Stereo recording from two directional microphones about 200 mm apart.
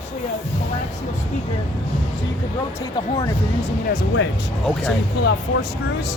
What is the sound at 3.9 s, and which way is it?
Speech, 50° left (ahead or behind).